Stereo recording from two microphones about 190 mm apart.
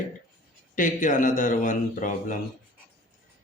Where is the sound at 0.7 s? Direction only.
40° left (ahead or behind).